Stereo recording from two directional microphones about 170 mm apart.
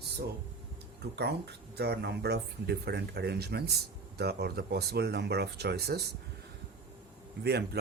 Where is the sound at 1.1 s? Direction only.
75° right (ahead or behind).